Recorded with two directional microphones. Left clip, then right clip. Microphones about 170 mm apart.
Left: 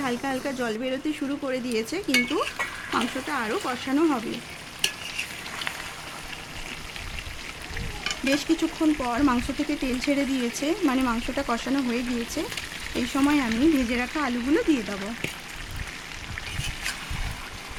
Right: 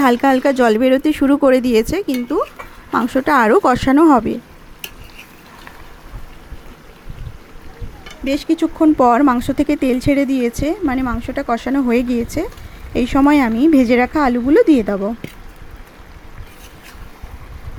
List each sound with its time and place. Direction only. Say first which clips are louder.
0.0 s speech: right 15 dB; 40° right (ahead or behind)
2.9 s speech: right 15 dB; 40° right (ahead or behind)
8.3 s speech: right 8 dB; 25° right (ahead or behind)